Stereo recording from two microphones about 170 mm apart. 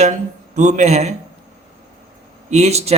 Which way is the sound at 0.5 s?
45° right (ahead or behind).